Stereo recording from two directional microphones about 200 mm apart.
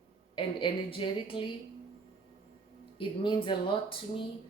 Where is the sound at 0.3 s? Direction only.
25° left (ahead or behind).